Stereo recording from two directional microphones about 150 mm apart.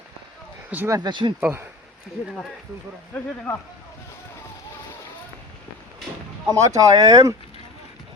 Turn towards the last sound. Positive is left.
turn(degrees=-25)  # may be behind; listen again after turning